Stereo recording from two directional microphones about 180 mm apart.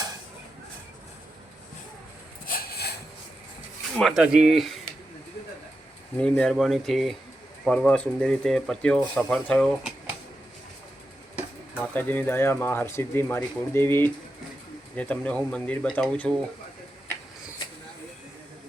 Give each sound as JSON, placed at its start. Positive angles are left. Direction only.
{"t": 2.5, "sound": "a sound", "side_deg": 55}
{"t": 3.9, "sound": "speech", "side_deg": 0}
{"t": 6.1, "sound": "speech", "side_deg": 5}
{"t": 11.7, "sound": "speech", "side_deg": 10}